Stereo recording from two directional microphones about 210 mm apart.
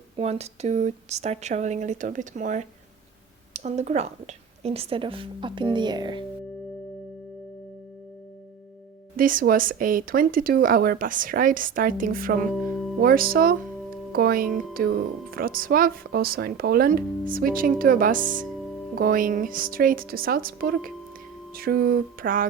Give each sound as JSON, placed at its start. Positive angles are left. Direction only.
{"t": 0.2, "sound": "a woman's voice", "side_deg": -30}
{"t": 9.1, "sound": "speech", "side_deg": -40}